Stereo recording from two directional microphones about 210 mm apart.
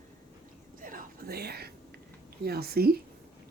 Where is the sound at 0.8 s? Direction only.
40° right (ahead or behind).